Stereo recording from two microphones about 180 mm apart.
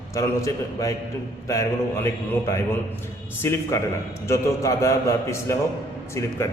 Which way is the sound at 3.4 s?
15° left (ahead or behind).